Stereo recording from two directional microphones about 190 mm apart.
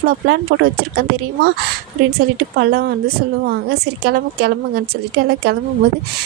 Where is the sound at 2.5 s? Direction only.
60° right (ahead or behind).